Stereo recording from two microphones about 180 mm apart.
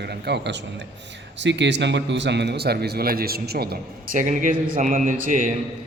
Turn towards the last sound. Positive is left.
turn(degrees=-45)  # may be behind; listen again after turning